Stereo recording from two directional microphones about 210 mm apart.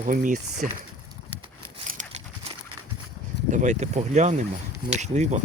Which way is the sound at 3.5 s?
35° right (ahead or behind).